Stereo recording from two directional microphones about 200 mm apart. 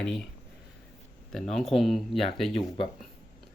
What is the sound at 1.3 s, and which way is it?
Speech, centre (ahead or behind).